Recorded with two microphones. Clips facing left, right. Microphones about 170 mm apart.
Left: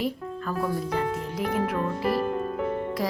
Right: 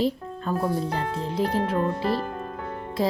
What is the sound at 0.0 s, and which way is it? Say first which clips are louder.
Speech: right 4 dB; 30° right (ahead or behind).